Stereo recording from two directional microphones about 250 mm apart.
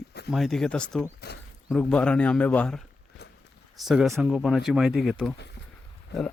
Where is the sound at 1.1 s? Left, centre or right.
Left.